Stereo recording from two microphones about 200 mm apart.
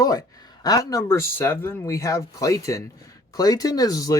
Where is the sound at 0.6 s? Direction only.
20° left (ahead or behind).